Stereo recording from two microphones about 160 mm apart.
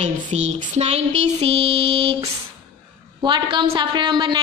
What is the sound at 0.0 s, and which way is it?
A woman's voice, 45° right (ahead or behind).